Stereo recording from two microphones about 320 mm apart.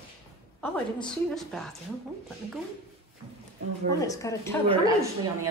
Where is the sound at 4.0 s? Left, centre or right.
Centre.